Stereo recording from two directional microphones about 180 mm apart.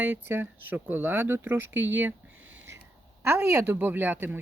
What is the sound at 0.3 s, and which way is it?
Speech, 10° right (ahead or behind).